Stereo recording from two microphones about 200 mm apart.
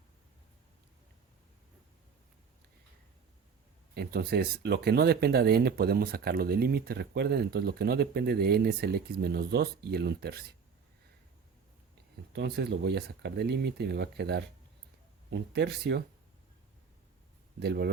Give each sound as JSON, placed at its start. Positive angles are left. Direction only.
{"t": 3.9, "sound": "speech", "side_deg": -50}
{"t": 12.3, "sound": "speech", "side_deg": -55}
{"t": 17.6, "sound": "speech", "side_deg": -55}